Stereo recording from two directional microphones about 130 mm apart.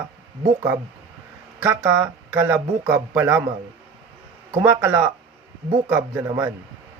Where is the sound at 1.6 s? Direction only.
20° right (ahead or behind).